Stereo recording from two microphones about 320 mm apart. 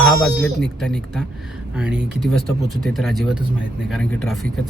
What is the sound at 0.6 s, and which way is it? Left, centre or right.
Speech, centre.